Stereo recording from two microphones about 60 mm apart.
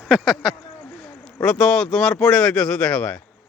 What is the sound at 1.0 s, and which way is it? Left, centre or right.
Speech, centre.